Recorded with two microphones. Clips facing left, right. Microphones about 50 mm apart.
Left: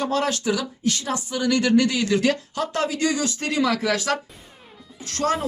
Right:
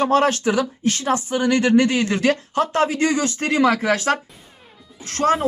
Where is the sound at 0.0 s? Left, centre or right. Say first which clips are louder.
Right 6 dB; right.